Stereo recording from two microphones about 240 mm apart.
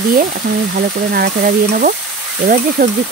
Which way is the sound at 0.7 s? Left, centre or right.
Right.